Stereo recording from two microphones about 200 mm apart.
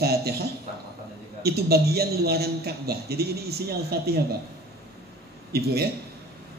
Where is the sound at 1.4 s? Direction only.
50° right (ahead or behind).